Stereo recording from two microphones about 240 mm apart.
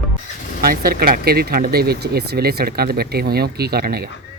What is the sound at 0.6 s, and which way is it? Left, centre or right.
Speech, right.